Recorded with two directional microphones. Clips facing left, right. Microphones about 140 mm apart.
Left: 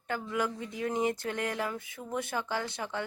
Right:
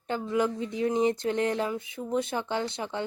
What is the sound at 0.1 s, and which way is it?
A woman's voice, 25° right (ahead or behind).